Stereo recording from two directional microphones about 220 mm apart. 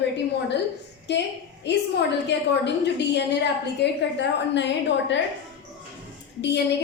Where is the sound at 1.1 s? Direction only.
50° left (ahead or behind).